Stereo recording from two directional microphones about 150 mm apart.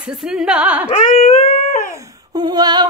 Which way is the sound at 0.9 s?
60° left (ahead or behind).